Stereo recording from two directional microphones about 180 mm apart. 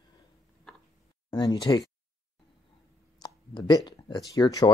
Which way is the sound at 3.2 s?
25° left (ahead or behind).